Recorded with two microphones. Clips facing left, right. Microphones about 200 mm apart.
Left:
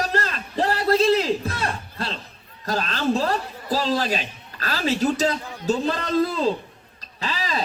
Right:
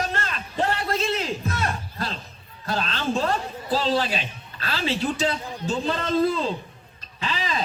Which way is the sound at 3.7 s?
40° left (ahead or behind).